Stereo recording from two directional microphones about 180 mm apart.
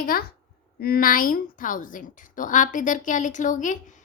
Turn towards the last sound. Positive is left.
turn(degrees=45)  # may be behind; listen again after turning